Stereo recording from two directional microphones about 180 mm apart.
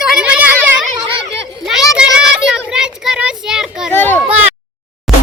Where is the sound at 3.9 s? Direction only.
10° left (ahead or behind).